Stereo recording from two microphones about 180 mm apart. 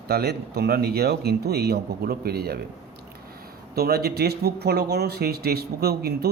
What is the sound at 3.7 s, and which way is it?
Speech, 60° right (ahead or behind).